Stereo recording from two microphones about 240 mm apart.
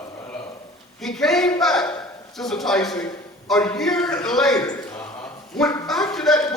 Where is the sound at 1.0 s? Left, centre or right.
Centre.